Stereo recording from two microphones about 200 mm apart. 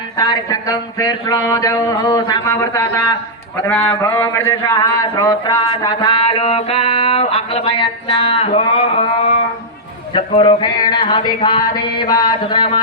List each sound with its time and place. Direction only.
0.2 s a man's voice: 15° left (ahead or behind)
10.2 s a man's voice: 25° left (ahead or behind)